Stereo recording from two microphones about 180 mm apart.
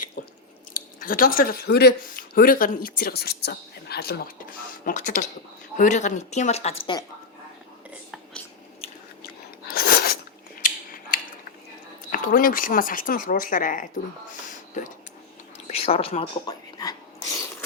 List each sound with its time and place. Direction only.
0.2 s a sound: 55° left (ahead or behind)
0.7 s speech: 50° left (ahead or behind); by 7.0 s 30° left (ahead or behind)
7.9 s whispering: 5° right (ahead or behind)
9.6 s a sound: 55° left (ahead or behind)
12.1 s speech: 50° left (ahead or behind)
15.6 s speech: 35° left (ahead or behind)